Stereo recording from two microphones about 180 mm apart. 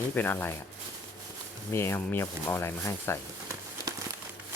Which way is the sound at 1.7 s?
15° left (ahead or behind).